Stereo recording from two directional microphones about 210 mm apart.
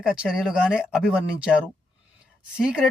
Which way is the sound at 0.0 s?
5° right (ahead or behind).